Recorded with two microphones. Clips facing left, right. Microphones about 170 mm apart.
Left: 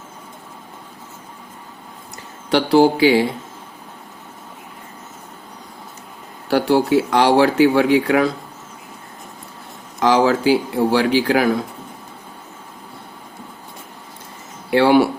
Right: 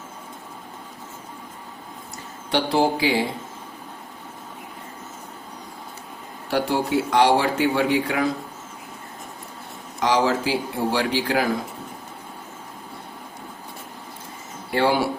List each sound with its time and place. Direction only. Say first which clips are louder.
2.5 s speech: left 7 dB; 75° left (ahead or behind)
6.5 s speech: left 7 dB; 65° left (ahead or behind)
10.0 s speech: left 5 dB; 70° left (ahead or behind)
14.7 s speech: left 7 dB; 70° left (ahead or behind)